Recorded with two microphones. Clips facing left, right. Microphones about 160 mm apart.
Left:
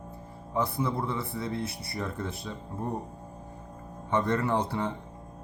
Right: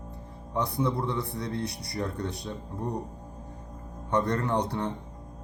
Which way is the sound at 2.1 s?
70° right (ahead or behind).